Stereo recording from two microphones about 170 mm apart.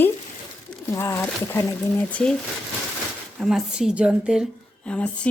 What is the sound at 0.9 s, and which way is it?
Speech, 15° left (ahead or behind).